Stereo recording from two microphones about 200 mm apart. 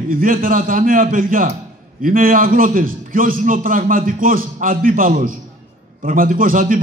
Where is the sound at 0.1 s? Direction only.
45° right (ahead or behind).